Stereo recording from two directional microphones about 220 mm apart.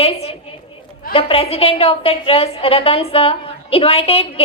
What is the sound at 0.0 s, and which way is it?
A woman's voice, 25° left (ahead or behind).